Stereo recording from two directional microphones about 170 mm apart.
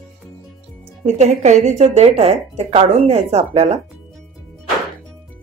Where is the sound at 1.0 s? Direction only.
40° right (ahead or behind).